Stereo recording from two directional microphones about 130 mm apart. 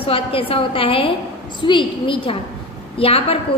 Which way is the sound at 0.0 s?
45° left (ahead or behind).